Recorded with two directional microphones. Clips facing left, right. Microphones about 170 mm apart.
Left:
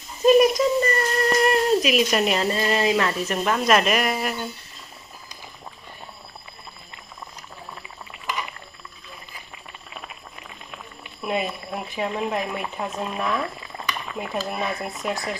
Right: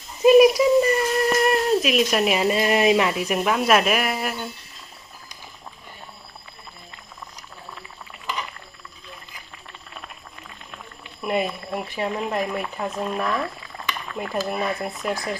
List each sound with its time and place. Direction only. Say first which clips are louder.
0.2 s speech: right 3 dB; 5° right (ahead or behind)
11.2 s speech: right 2 dB; centre (ahead or behind)